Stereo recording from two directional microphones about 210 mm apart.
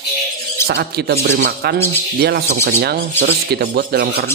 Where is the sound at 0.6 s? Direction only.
50° right (ahead or behind).